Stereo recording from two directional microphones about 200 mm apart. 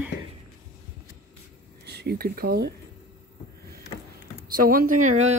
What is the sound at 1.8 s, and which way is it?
Speech, 55° right (ahead or behind).